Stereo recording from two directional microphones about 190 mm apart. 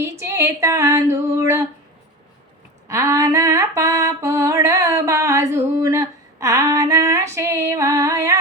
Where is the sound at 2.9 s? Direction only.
15° right (ahead or behind).